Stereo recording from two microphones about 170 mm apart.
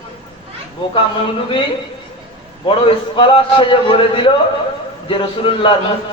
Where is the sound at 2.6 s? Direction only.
30° left (ahead or behind).